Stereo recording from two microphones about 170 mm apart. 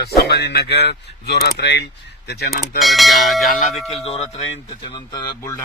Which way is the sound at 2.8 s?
Centre (ahead or behind).